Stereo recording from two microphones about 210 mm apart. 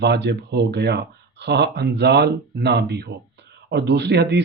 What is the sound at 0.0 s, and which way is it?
Speech, 55° right (ahead or behind).